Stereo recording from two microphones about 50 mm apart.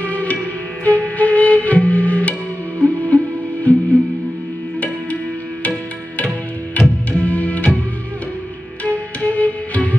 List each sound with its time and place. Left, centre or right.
0.0 s music: left
6.8 s music: left
9.2 s music: left